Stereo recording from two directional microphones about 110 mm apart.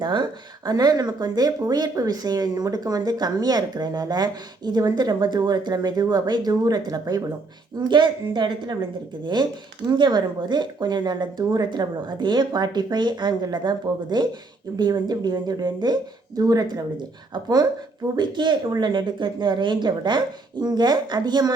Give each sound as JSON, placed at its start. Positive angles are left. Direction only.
{"t": 0.0, "sound": "a woman's voice", "side_deg": -40}